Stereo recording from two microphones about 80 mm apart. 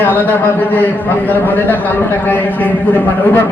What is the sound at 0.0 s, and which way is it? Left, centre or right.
A man's voice, left.